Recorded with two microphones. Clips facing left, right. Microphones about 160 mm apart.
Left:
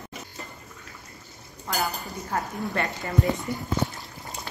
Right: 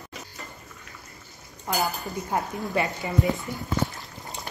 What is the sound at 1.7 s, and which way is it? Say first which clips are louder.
Speech: right 2 dB; 15° right (ahead or behind).